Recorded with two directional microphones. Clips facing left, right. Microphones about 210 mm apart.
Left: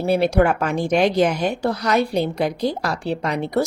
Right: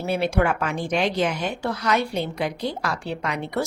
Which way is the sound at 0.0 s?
40° left (ahead or behind).